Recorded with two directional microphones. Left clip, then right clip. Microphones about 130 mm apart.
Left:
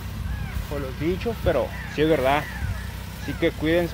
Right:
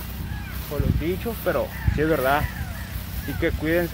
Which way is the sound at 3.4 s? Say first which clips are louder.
Left 1 dB; 30° left (ahead or behind).